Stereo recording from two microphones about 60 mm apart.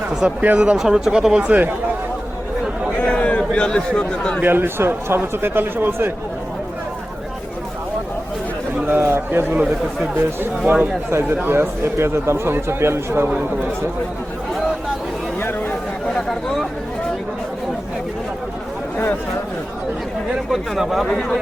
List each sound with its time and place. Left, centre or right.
0.3 s speech: right
0.8 s speech: centre
3.0 s a sound: left
4.4 s a man's voice: right
9.0 s a man's voice: right
10.7 s a man's voice: right
11.6 s speech: right
16.1 s speech: centre
20.5 s speech: centre
21.1 s speech: centre